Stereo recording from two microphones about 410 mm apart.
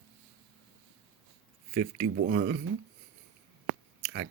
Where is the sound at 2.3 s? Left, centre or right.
Right.